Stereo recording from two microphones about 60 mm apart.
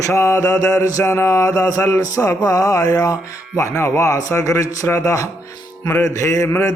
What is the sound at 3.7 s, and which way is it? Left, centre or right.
Speech, left.